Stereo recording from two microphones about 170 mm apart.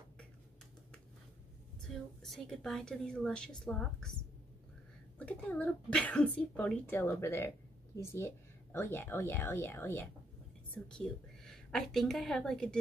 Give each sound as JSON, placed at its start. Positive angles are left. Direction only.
{"t": 1.8, "sound": "a woman's voice", "side_deg": 5}
{"t": 5.2, "sound": "a woman's voice", "side_deg": 10}